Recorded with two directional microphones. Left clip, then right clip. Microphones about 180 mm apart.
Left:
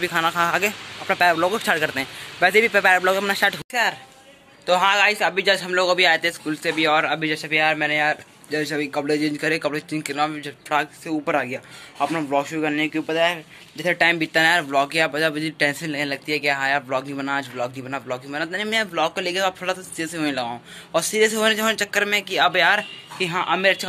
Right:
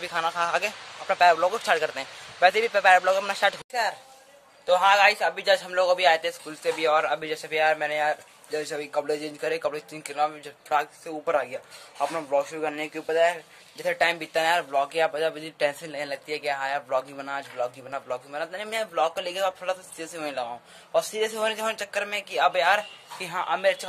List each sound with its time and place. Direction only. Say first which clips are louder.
0.0 s a man's voice: left 6 dB; centre (ahead or behind)